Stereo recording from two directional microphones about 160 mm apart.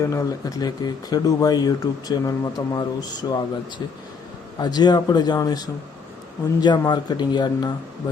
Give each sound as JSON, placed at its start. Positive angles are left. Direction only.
{"t": 0.0, "sound": "speech", "side_deg": 20}
{"t": 4.6, "sound": "speech", "side_deg": 25}